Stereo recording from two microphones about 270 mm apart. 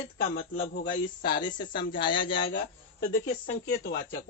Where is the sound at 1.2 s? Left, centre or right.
Centre.